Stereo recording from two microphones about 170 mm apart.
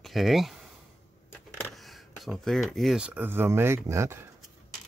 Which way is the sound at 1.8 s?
Centre (ahead or behind).